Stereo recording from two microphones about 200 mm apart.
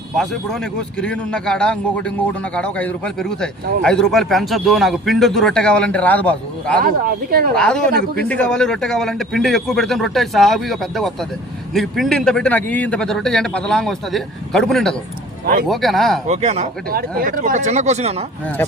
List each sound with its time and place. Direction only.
0.2 s speech: centre (ahead or behind)
6.7 s speech: 50° right (ahead or behind)
7.5 s speech: 5° left (ahead or behind)
7.9 s speech: 50° right (ahead or behind)
8.3 s speech: 5° left (ahead or behind)
16.2 s speech: 35° right (ahead or behind)
16.9 s speech: 45° right (ahead or behind); by 18.3 s 30° right (ahead or behind)